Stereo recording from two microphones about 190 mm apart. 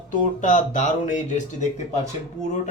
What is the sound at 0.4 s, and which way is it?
Speech, 40° left (ahead or behind).